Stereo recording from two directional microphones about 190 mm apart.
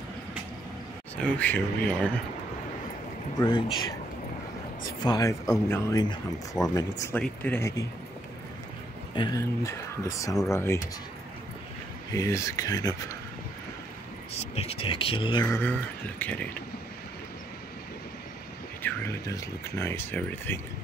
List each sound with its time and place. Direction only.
1.1 s speech: 5° left (ahead or behind)
3.3 s speech: 25° left (ahead or behind)
5.0 s speech: 20° left (ahead or behind)
7.2 s speech: 5° left (ahead or behind)
9.1 s speech: 20° left (ahead or behind)
12.1 s speech: 15° left (ahead or behind)
14.3 s speech: 35° left (ahead or behind)
15.4 s speech: 10° left (ahead or behind)
18.8 s speech: 10° left (ahead or behind)